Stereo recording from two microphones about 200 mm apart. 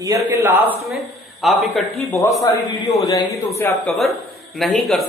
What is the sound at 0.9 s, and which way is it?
Speech, centre (ahead or behind).